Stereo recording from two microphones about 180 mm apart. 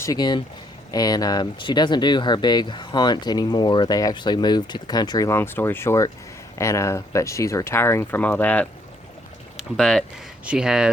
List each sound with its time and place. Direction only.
0.0 s speech: 20° left (ahead or behind)
9.7 s speech: centre (ahead or behind)